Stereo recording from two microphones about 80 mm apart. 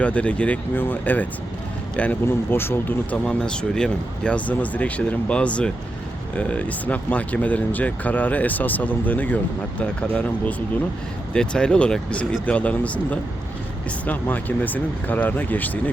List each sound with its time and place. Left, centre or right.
0.0 s speech: centre
3.2 s speech: centre